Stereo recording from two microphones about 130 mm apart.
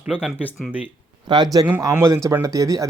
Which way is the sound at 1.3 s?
35° right (ahead or behind).